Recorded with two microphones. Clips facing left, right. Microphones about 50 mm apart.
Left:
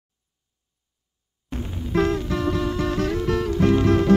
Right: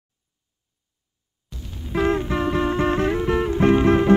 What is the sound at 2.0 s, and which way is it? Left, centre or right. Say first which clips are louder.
Music: right 2 dB; right.